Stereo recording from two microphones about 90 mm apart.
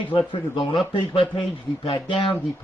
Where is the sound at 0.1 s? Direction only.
65° left (ahead or behind).